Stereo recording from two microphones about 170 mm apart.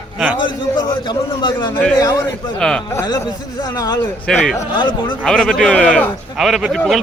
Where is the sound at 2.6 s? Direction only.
5° left (ahead or behind).